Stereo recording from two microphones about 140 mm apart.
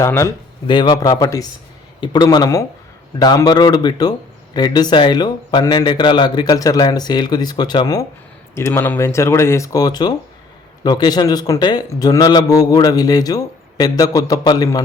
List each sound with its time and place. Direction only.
0.0 s a man's voice: 20° left (ahead or behind)
0.7 s a man's voice: 30° left (ahead or behind)
8.5 s a man's voice: 20° left (ahead or behind)